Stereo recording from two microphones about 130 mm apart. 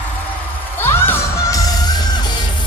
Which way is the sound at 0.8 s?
20° left (ahead or behind).